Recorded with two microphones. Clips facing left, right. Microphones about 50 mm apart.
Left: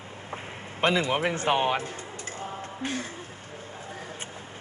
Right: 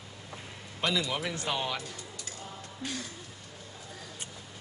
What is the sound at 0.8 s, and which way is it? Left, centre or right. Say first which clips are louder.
Speech: left 7 dB; left.